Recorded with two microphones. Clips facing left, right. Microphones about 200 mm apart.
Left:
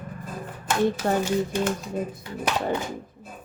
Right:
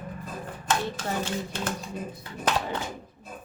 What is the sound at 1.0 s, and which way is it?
Speech, 50° left (ahead or behind).